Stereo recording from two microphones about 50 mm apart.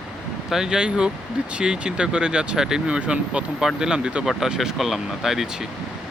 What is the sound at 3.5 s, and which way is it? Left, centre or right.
Speech, centre.